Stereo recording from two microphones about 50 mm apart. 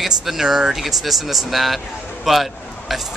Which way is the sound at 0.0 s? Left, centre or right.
Centre.